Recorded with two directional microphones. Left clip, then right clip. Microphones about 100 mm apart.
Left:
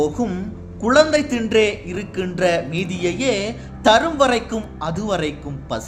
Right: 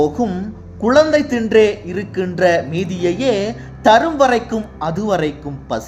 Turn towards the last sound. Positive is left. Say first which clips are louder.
# right 4 dB
turn(degrees=-35)  # may be behind; listen again after turning